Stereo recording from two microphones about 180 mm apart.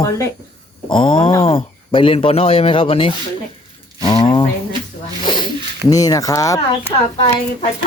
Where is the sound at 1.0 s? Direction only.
25° left (ahead or behind).